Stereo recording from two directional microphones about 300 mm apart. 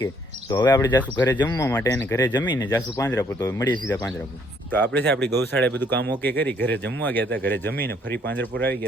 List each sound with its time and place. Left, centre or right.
0.0 s speech: centre
4.9 s speech: right
5.5 s speech: centre